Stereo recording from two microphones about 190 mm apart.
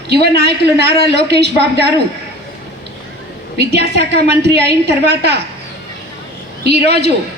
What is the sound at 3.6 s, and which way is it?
A woman's voice, 60° right (ahead or behind).